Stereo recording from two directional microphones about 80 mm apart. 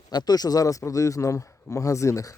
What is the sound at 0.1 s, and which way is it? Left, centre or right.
Speech, left.